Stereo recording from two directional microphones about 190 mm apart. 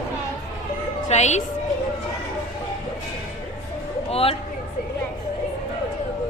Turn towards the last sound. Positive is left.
turn(degrees=30)  # may be behind; listen again after turning